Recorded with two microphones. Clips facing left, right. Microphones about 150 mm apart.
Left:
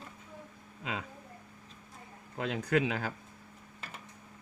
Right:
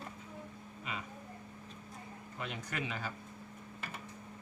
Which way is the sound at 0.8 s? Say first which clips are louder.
Left 5 dB; 90° left.